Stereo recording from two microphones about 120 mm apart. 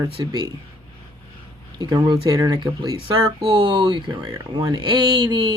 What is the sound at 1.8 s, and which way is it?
Speech, 35° right (ahead or behind).